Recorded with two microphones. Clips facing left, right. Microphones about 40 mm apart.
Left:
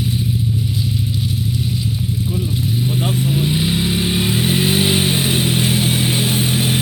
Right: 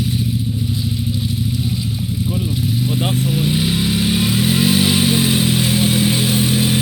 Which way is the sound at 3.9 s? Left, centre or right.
Centre.